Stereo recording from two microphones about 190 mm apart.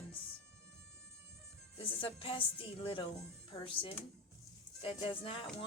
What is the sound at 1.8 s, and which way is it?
Speech, 30° left (ahead or behind).